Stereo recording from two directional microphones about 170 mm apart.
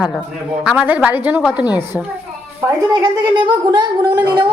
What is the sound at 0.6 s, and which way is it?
Speech, 10° right (ahead or behind).